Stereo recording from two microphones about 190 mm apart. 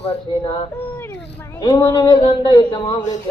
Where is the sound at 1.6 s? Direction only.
20° left (ahead or behind).